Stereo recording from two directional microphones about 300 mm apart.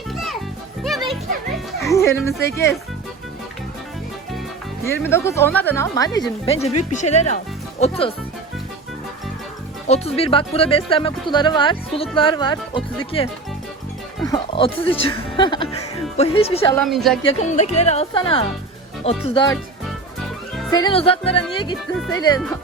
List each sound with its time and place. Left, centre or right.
0.1 s music: centre
1.9 s speech: centre
5.0 s speech: centre
6.9 s music: left
9.8 s speech: left
16.1 s music: centre
16.7 s speech: centre
17.3 s music: left
19.0 s speech: centre
20.7 s speech: centre